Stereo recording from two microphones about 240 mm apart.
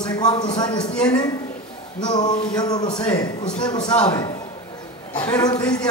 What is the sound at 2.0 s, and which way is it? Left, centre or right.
Speech, centre.